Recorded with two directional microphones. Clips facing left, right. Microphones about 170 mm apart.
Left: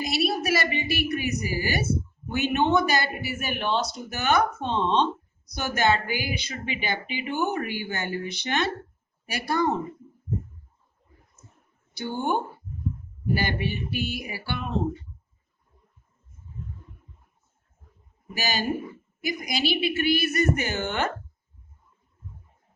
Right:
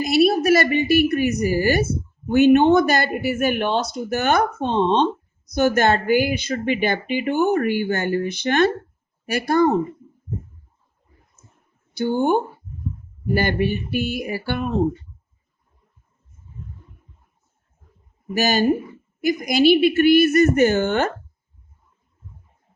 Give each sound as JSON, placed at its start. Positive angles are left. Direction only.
{"t": 0.1, "sound": "a woman's voice", "side_deg": -45}
{"t": 11.9, "sound": "a woman's voice", "side_deg": -45}
{"t": 18.3, "sound": "a woman's voice", "side_deg": -45}